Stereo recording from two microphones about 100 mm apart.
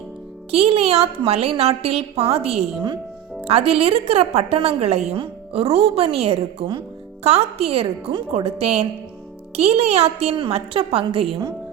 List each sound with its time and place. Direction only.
0.5 s a woman's voice: 80° right
3.4 s a woman's voice: 90° right
5.2 s a woman's voice: 75° right (ahead or behind)
7.3 s a woman's voice: 85° right; by 11.3 s 70° right (ahead or behind)